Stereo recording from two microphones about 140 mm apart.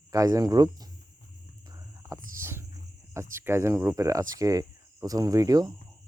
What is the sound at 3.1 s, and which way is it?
Speech, 20° right (ahead or behind).